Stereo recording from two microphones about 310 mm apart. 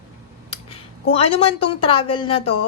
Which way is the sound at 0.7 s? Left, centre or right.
Centre.